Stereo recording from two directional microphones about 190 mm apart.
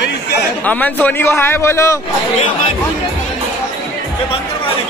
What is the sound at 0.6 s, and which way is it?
A man's voice, 10° left (ahead or behind).